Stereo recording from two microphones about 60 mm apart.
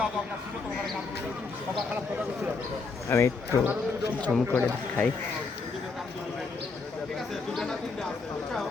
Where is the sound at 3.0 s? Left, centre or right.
Left.